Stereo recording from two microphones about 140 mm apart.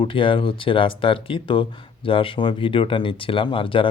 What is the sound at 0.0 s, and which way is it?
Speech, 35° left (ahead or behind).